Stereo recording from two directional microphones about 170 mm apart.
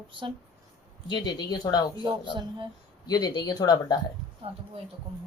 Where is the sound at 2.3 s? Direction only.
30° right (ahead or behind).